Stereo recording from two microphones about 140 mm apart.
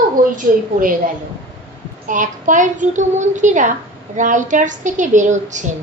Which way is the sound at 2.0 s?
65° right (ahead or behind).